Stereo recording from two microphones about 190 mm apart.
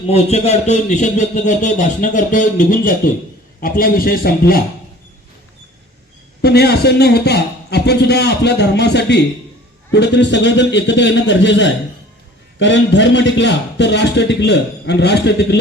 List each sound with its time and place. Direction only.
0.1 s a man's voice: 35° left (ahead or behind); by 4.6 s 50° left (ahead or behind)
6.4 s a man's voice: 60° left (ahead or behind)